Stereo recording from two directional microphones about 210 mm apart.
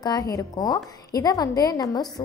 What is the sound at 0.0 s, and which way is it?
A woman's voice, 15° left (ahead or behind).